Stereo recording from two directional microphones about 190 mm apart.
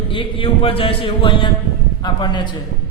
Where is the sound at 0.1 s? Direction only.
25° left (ahead or behind).